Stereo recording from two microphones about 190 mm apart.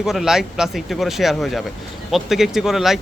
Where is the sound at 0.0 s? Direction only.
Centre (ahead or behind).